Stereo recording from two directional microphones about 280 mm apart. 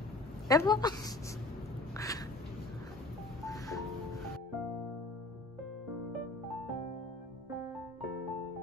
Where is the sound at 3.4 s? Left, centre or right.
Centre.